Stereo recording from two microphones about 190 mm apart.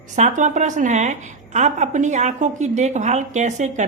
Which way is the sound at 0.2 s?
40° right (ahead or behind).